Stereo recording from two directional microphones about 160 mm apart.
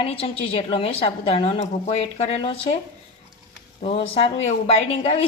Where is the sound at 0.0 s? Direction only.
40° left (ahead or behind).